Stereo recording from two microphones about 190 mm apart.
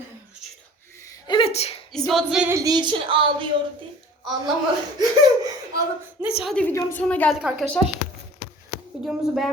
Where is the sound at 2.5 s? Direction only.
20° right (ahead or behind).